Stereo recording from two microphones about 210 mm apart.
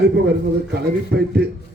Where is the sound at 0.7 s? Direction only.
50° right (ahead or behind).